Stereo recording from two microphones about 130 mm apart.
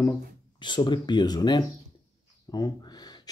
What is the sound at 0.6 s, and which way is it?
Speech, 35° left (ahead or behind).